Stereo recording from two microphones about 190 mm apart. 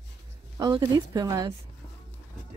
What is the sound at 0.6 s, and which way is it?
Speech, 20° right (ahead or behind).